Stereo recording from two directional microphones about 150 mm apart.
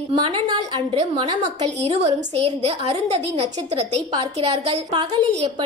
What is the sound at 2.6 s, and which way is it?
A woman's voice, 45° right (ahead or behind).